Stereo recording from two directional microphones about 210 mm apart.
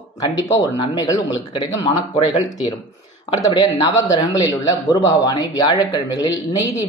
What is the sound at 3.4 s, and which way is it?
Speech, 20° left (ahead or behind).